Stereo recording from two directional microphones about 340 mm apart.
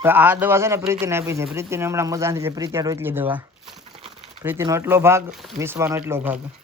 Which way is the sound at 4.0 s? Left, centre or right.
Centre.